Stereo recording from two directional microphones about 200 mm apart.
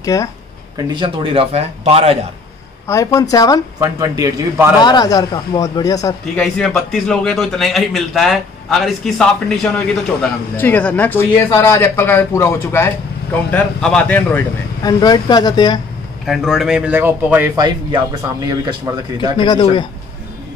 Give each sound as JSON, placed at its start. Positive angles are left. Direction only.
{"t": 0.0, "sound": "speech", "side_deg": 15}
{"t": 0.8, "sound": "speech", "side_deg": -25}
{"t": 2.9, "sound": "speech", "side_deg": 15}
{"t": 3.8, "sound": "a man's voice", "side_deg": -15}
{"t": 4.7, "sound": "a man's voice", "side_deg": 20}
{"t": 6.3, "sound": "a man's voice", "side_deg": 5}
{"t": 14.8, "sound": "a man's voice", "side_deg": 20}
{"t": 16.3, "sound": "a man's voice", "side_deg": 0}
{"t": 18.7, "sound": "a man's voice", "side_deg": -20}
{"t": 19.3, "sound": "a man's voice", "side_deg": 20}